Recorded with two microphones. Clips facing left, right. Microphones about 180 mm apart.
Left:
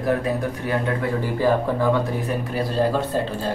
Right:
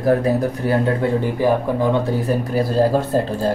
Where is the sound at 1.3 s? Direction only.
15° right (ahead or behind).